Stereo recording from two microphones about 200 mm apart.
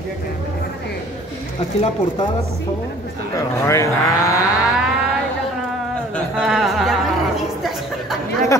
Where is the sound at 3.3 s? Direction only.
15° left (ahead or behind).